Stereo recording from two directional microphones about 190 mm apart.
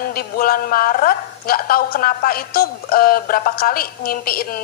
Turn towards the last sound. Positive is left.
turn(degrees=50)  # may be behind; listen again after turning